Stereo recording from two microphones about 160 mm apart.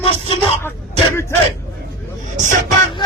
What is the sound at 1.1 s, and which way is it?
Speech, 15° left (ahead or behind).